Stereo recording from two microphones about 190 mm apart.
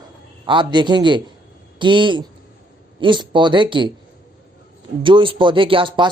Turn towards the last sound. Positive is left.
turn(degrees=-25)  # may be behind; listen again after turning